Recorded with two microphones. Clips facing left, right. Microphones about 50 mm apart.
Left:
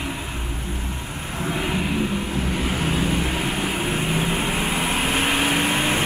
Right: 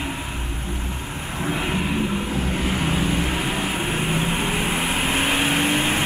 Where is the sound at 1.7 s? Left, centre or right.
Right.